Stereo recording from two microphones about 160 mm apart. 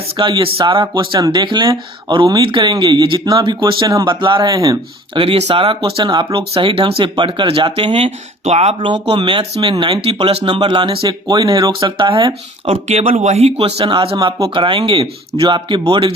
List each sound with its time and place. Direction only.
0.2 s speech: 35° right (ahead or behind)
5.1 s speech: 35° right (ahead or behind)
12.6 s speech: 45° right (ahead or behind); by 16.1 s 30° right (ahead or behind)